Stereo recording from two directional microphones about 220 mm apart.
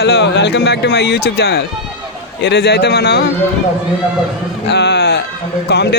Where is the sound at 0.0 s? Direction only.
55° left (ahead or behind).